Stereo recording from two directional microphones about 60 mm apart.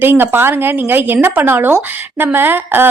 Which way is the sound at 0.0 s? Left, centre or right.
Right.